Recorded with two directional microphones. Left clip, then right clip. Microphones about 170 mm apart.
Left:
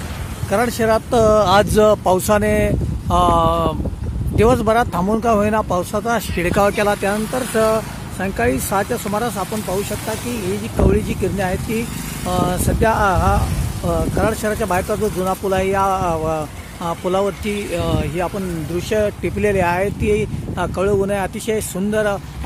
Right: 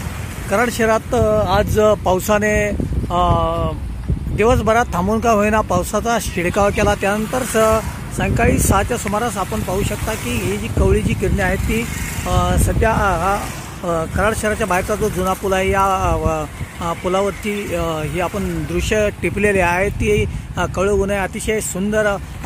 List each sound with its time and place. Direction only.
0.5 s speech: centre (ahead or behind)
1.1 s speech: 20° left (ahead or behind)
1.4 s speech: 30° left (ahead or behind)
1.8 s speech: 10° left (ahead or behind)
3.1 s a sound: 20° left (ahead or behind)
4.4 s speech: 5° left (ahead or behind)